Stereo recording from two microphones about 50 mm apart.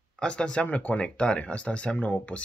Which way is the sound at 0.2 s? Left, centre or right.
Centre.